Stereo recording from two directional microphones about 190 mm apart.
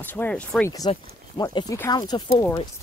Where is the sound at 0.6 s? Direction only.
20° left (ahead or behind).